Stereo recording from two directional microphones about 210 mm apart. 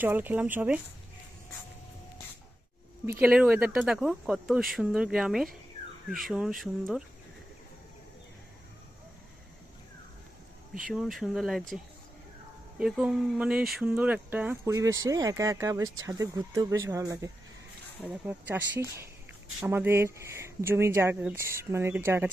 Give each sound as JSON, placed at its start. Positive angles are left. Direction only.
{"t": 0.0, "sound": "speech", "side_deg": -10}
{"t": 3.1, "sound": "speech", "side_deg": -5}
{"t": 10.9, "sound": "speech", "side_deg": 0}
{"t": 12.8, "sound": "speech", "side_deg": -5}